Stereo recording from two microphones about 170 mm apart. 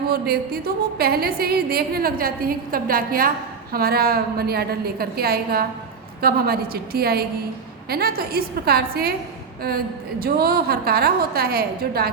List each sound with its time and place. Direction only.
0.1 s a woman's voice: 65° right (ahead or behind)